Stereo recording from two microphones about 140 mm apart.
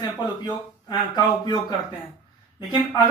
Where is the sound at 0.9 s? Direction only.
30° left (ahead or behind).